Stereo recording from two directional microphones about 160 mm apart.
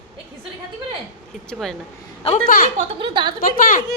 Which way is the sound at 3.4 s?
60° left (ahead or behind).